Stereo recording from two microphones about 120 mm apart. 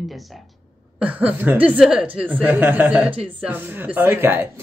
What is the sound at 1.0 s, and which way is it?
Speech, 15° right (ahead or behind).